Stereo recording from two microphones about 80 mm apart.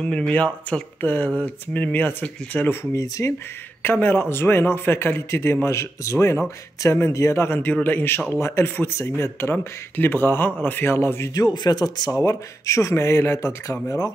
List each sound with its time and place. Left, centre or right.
0.3 s a man's voice: centre
2.8 s a man's voice: left
8.4 s speech: left
8.6 s a man's voice: left
11.3 s speech: left
12.1 s speech: left